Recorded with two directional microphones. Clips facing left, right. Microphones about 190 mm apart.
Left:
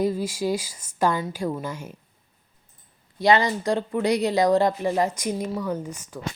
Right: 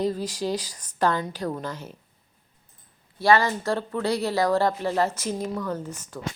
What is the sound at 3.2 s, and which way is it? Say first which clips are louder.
Speech: left 1 dB; 20° left (ahead or behind).